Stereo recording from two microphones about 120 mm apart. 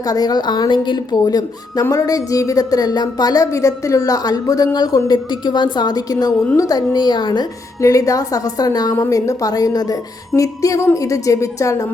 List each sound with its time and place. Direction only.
0.1 s a woman's voice: 35° left (ahead or behind)